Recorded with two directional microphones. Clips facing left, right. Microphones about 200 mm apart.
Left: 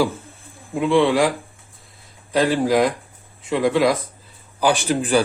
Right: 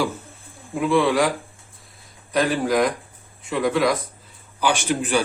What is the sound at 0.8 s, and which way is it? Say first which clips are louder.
Speech: left 2 dB; 25° left (ahead or behind).